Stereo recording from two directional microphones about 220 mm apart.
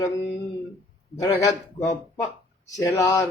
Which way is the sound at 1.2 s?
15° left (ahead or behind).